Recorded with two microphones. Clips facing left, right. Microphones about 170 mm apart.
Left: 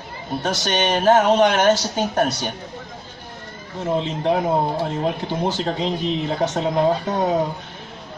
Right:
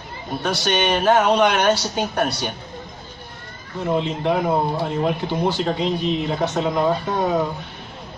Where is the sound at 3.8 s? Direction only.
35° left (ahead or behind).